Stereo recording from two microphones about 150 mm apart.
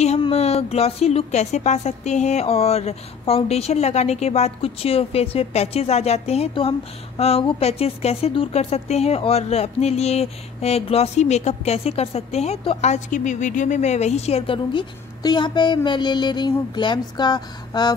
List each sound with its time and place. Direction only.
0.2 s speech: 45° left (ahead or behind)